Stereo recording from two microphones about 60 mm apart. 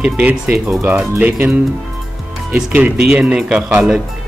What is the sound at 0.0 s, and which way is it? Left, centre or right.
Speech, right.